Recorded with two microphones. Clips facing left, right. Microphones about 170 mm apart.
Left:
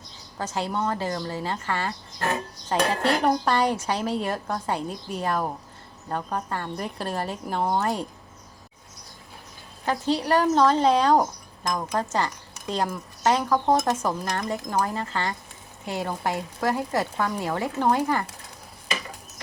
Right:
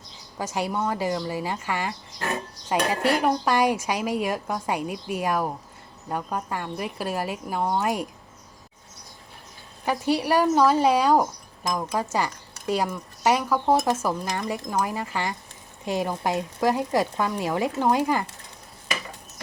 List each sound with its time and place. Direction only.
0.3 s speech: 10° right (ahead or behind)
9.8 s speech: 10° right (ahead or behind)